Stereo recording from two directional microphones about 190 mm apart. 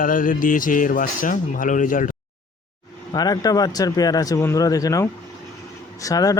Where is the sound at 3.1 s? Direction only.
20° left (ahead or behind).